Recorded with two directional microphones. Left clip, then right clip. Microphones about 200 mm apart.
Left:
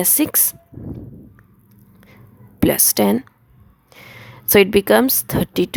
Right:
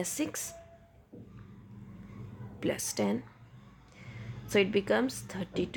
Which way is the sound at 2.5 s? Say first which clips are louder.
Left 15 dB; 50° left (ahead or behind).